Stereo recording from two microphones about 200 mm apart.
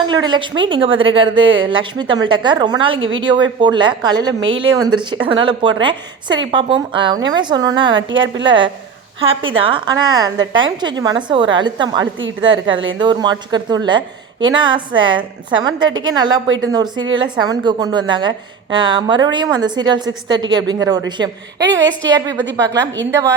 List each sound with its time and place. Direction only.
0.0 s a woman's voice: 20° right (ahead or behind)
7.9 s a woman's voice: 70° right (ahead or behind)
8.4 s a woman's voice: 25° right (ahead or behind)